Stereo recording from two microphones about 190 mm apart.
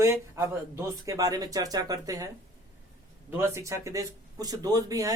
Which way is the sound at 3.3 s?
15° right (ahead or behind).